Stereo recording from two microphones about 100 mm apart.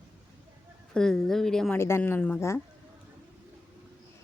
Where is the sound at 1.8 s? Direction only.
25° left (ahead or behind).